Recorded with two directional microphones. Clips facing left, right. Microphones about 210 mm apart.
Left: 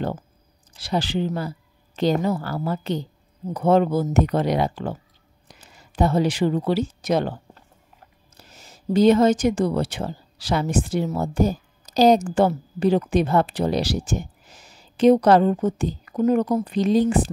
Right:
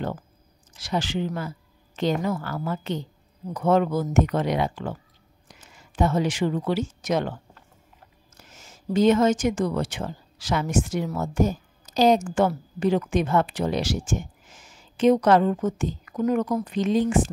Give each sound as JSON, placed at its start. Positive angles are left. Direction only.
{"t": 0.7, "sound": "speech", "side_deg": 35}